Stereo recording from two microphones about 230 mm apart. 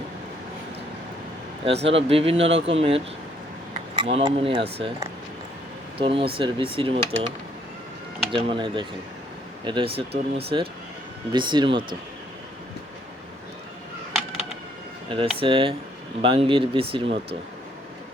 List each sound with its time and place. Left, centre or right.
1.7 s speech: right
2.0 s speech: right
6.0 s speech: right
15.1 s speech: right